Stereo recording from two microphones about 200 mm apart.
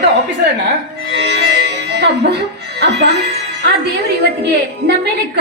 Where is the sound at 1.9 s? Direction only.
55° right (ahead or behind).